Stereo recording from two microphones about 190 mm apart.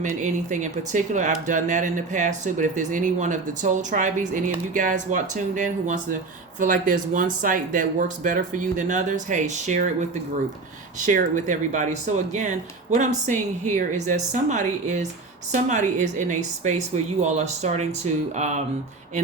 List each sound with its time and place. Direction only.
0.2 s speech: 40° right (ahead or behind)
11.0 s speech: 40° right (ahead or behind)